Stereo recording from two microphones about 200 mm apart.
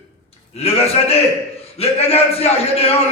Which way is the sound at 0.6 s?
30° left (ahead or behind).